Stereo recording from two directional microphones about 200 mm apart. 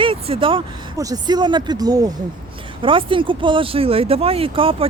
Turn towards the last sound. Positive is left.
turn(degrees=-25)  # may be behind; listen again after turning